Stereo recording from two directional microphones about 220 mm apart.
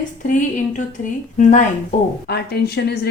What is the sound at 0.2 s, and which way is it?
A woman's voice, 35° left (ahead or behind).